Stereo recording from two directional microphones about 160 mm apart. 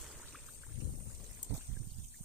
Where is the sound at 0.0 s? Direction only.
Centre (ahead or behind).